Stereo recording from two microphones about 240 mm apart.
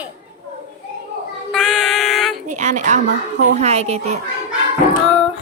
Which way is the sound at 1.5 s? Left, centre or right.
Centre.